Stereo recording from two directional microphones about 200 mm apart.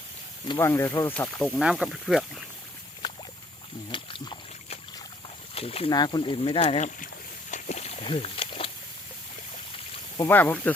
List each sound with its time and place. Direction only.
0.4 s speech: 15° left (ahead or behind); by 2.4 s centre (ahead or behind)
3.0 s boat: 20° left (ahead or behind)
3.9 s a sound: 25° left (ahead or behind)
5.5 s speech: 30° left (ahead or behind)
7.5 s a sound: 35° left (ahead or behind)
10.2 s speech: 10° left (ahead or behind)